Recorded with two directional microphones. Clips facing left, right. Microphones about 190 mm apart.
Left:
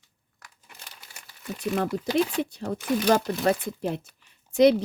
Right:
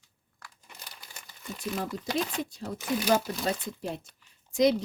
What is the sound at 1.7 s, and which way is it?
Speech, 65° left (ahead or behind).